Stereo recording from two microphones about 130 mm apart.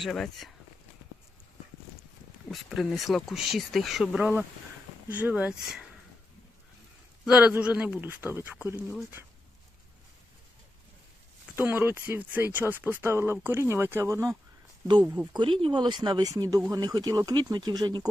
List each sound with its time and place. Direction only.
0.0 s speech: centre (ahead or behind)
2.5 s speech: centre (ahead or behind)
7.3 s speech: 10° right (ahead or behind)
9.2 s a sound: 15° right (ahead or behind)
11.5 s speech: 15° right (ahead or behind)
15.3 s speech: 40° right (ahead or behind)